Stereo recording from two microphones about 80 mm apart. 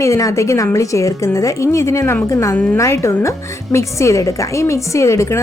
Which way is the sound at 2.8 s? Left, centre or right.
Left.